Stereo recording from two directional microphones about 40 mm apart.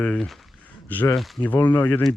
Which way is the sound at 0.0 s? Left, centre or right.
Left.